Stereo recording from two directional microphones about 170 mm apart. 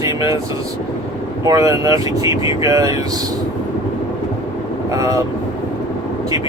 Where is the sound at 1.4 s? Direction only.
20° right (ahead or behind).